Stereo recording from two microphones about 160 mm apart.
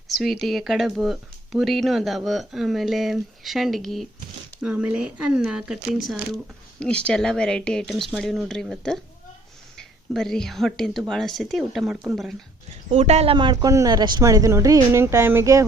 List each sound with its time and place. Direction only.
0.1 s speech: centre (ahead or behind)
12.9 s speech: 40° right (ahead or behind)
13.3 s speech: 25° right (ahead or behind)